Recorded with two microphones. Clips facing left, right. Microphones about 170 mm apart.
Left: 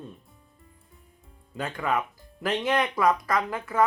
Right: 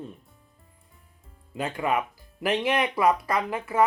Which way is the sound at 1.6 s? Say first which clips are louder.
Right 2 dB; 15° right (ahead or behind).